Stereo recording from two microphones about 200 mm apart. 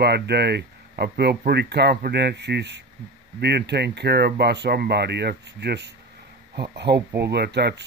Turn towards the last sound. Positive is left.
turn(degrees=-55)  # may be behind; listen again after turning